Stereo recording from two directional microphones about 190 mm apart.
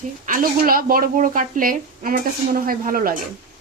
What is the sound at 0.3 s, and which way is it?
Speech, 45° right (ahead or behind).